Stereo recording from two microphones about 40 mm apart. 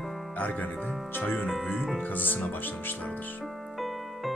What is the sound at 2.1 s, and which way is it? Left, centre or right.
Speech, left.